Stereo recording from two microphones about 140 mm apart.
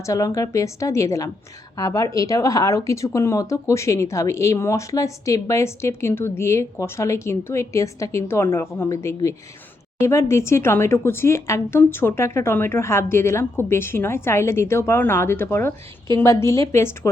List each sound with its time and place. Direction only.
0.0 s speech: 20° left (ahead or behind)